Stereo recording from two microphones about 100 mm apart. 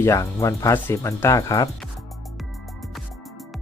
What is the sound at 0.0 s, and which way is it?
Speech, 35° left (ahead or behind).